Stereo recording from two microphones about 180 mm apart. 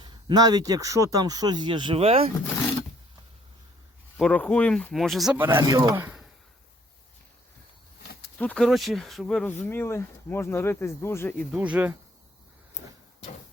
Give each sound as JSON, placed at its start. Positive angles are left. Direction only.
{"t": 0.0, "sound": "speech", "side_deg": -25}
{"t": 4.2, "sound": "speech", "side_deg": 5}
{"t": 5.5, "sound": "speech", "side_deg": -20}
{"t": 8.4, "sound": "speech", "side_deg": 5}
{"t": 11.5, "sound": "speech", "side_deg": -5}
{"t": 12.8, "sound": "a sound", "side_deg": 40}